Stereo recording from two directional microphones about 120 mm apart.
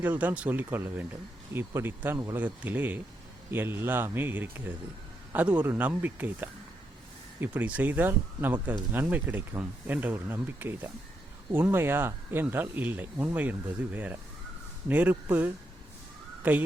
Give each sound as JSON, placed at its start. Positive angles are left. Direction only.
{"t": 0.0, "sound": "speech", "side_deg": -15}